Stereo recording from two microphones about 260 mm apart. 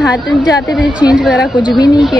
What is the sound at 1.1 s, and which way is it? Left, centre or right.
Speech, centre.